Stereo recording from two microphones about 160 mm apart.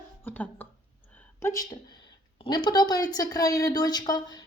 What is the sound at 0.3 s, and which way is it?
Speech, 10° left (ahead or behind).